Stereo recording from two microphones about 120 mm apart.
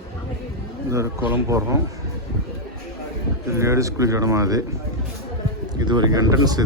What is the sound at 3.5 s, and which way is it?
Speech, 25° right (ahead or behind).